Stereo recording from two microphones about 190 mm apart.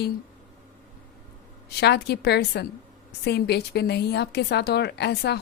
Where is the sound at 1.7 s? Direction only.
60° left (ahead or behind).